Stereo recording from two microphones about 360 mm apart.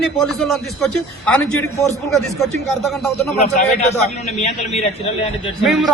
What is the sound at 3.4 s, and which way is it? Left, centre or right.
A man's voice, centre.